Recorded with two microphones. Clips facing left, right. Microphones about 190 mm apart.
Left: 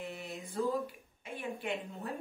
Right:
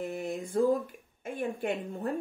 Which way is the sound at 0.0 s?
50° right (ahead or behind).